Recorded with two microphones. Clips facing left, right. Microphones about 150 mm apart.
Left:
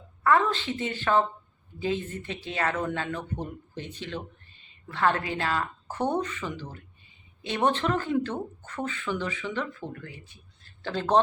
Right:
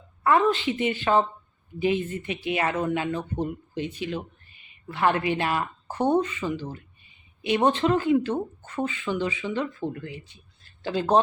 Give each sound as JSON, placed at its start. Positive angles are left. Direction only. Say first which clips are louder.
{"t": 0.2, "sound": "speech", "louder": "right 2 dB", "side_deg": -15}